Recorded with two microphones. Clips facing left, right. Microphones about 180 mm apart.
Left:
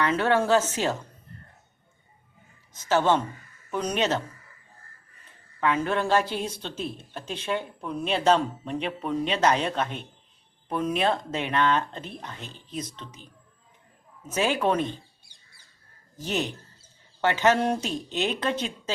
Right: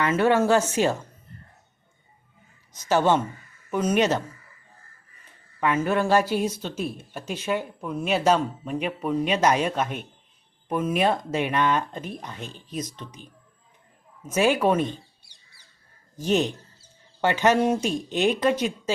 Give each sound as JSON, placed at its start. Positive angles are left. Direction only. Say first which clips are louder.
{"t": 0.0, "sound": "speech", "louder": "right 3 dB", "side_deg": -10}
{"t": 2.9, "sound": "speech", "louder": "right 2 dB", "side_deg": -10}
{"t": 5.5, "sound": "speech", "louder": "right 2 dB", "side_deg": -10}
{"t": 14.3, "sound": "speech", "louder": "right 4 dB", "side_deg": -10}
{"t": 15.2, "sound": "bird", "louder": "even", "side_deg": 50}
{"t": 16.2, "sound": "speech", "louder": "right 6 dB", "side_deg": -20}